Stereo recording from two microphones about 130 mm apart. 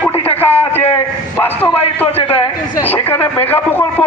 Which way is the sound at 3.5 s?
15° left (ahead or behind).